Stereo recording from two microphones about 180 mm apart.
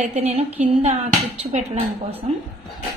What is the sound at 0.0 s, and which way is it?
Speech, 40° right (ahead or behind).